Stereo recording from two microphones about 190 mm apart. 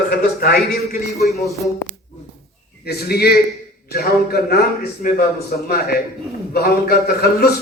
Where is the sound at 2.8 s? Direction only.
55° left (ahead or behind).